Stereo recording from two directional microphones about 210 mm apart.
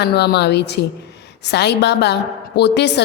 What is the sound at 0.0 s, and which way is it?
A woman's voice, 50° left (ahead or behind).